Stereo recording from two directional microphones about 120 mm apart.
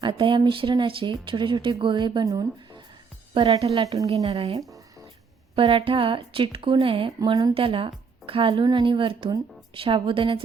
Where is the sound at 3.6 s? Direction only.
55° right (ahead or behind).